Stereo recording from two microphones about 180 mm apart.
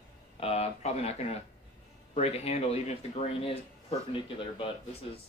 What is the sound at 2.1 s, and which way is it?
Speech, 35° left (ahead or behind).